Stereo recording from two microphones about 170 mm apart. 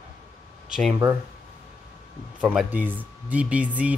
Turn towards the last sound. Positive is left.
turn(degrees=-10)  # may be behind; listen again after turning